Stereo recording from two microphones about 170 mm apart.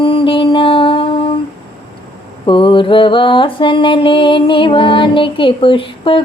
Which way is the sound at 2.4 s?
30° left (ahead or behind).